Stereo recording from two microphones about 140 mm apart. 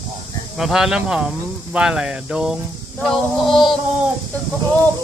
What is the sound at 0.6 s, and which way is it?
Speech, 5° right (ahead or behind).